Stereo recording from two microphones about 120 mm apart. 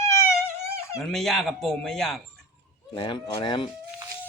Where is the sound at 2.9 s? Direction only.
40° left (ahead or behind).